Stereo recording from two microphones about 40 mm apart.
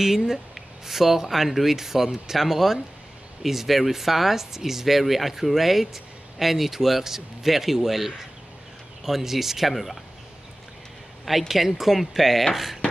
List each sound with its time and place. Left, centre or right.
0.0 s speech: centre
11.2 s speech: centre